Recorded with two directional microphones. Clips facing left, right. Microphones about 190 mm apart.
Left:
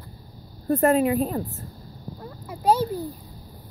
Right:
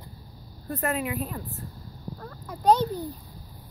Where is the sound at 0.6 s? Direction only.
35° left (ahead or behind).